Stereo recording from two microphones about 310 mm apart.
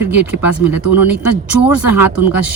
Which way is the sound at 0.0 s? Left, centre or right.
Centre.